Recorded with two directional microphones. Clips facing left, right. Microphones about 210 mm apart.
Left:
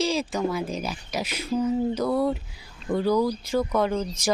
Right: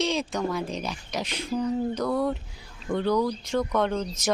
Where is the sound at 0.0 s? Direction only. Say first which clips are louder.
Left 2 dB; centre (ahead or behind).